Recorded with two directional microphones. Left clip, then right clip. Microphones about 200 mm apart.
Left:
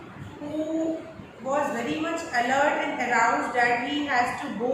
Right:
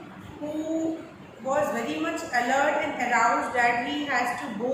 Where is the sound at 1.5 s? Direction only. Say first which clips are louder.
Even; 15° right (ahead or behind).